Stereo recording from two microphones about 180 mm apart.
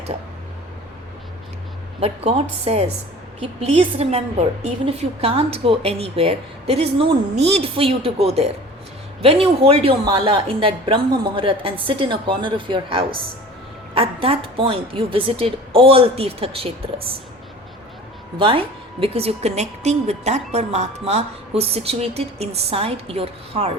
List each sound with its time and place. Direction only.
2.0 s a woman's voice: 35° right (ahead or behind)
18.3 s a woman's voice: 30° right (ahead or behind)